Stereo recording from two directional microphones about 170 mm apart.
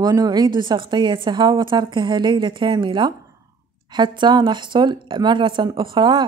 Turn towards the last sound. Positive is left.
turn(degrees=-25)  # may be behind; listen again after turning